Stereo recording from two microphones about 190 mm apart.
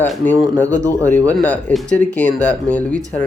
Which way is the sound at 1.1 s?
10° left (ahead or behind).